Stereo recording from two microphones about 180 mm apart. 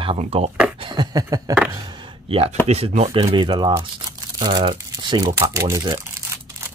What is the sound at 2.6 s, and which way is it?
Speech, 35° right (ahead or behind).